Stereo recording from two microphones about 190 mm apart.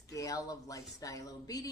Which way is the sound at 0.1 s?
15° left (ahead or behind).